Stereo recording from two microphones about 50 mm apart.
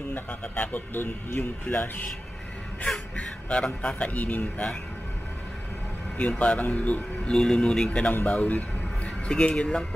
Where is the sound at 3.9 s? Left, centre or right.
Left.